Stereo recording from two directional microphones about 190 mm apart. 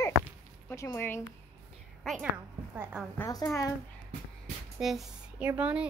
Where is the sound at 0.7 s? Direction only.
15° left (ahead or behind).